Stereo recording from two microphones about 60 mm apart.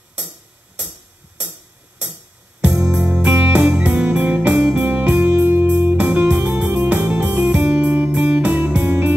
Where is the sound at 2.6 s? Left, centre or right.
Centre.